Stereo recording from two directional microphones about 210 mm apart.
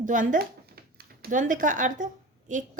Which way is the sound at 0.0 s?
40° right (ahead or behind).